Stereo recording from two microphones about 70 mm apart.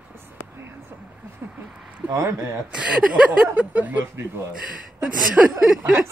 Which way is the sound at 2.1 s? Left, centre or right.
Right.